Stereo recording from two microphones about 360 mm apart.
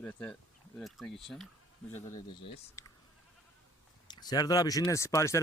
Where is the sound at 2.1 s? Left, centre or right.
Centre.